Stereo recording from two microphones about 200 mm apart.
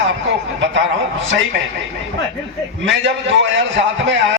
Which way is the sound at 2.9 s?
70° right (ahead or behind).